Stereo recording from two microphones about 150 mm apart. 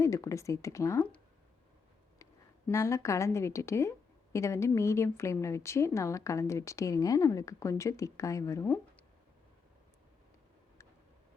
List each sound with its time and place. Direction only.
0.0 s speech: 20° left (ahead or behind)
2.6 s speech: 20° left (ahead or behind)